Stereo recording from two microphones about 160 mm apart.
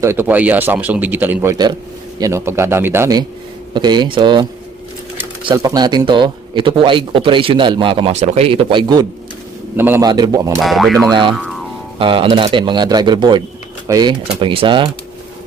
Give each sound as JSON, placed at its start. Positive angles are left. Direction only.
{"t": 0.0, "sound": "a man's voice", "side_deg": -15}
{"t": 5.5, "sound": "a man's voice", "side_deg": -25}
{"t": 9.7, "sound": "a man's voice", "side_deg": -15}
{"t": 10.6, "sound": "speech", "side_deg": 0}
{"t": 11.0, "sound": "speech", "side_deg": -30}